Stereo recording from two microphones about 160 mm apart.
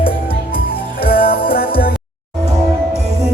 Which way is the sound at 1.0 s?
70° left (ahead or behind).